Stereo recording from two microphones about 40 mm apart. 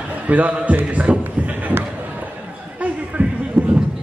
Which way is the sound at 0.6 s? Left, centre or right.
Right.